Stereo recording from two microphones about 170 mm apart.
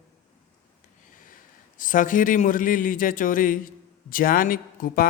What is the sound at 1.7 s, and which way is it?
A man's voice, 50° left (ahead or behind).